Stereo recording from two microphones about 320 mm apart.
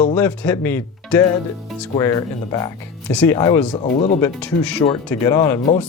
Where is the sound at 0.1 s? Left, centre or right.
Centre; by 4.2 s left.